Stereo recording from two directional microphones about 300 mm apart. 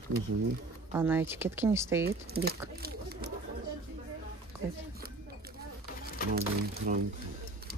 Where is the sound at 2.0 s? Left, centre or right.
Right.